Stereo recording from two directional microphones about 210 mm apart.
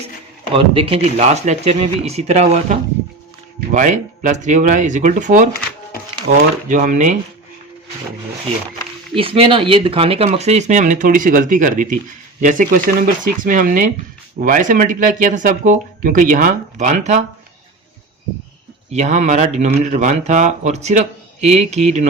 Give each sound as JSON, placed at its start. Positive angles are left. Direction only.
{"t": 0.5, "sound": "speech", "side_deg": -25}
{"t": 9.1, "sound": "speech", "side_deg": -25}
{"t": 18.9, "sound": "speech", "side_deg": -35}